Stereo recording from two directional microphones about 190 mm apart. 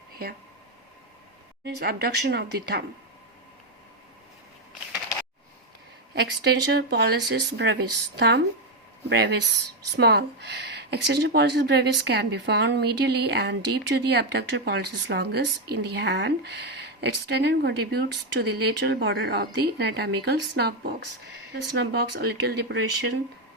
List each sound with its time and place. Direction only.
1.6 s speech: 55° right (ahead or behind)
6.1 s speech: 60° right (ahead or behind)